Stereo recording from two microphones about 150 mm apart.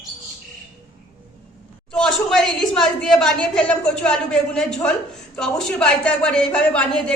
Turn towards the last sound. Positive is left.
turn(degrees=5)  # may be behind; listen again after turning